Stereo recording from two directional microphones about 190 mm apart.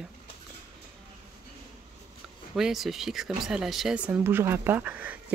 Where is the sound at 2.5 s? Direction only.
Centre (ahead or behind).